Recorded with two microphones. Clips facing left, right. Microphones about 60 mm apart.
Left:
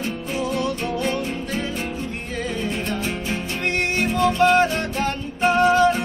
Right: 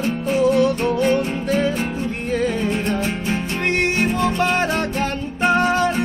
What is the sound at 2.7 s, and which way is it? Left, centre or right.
Music, right.